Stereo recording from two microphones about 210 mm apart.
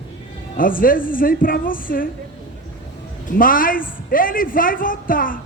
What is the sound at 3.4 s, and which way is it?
Speech, 40° left (ahead or behind).